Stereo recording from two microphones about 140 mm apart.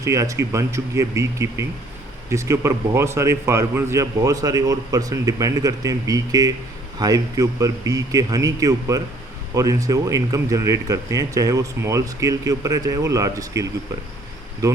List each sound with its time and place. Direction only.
0.0 s speech: 20° right (ahead or behind)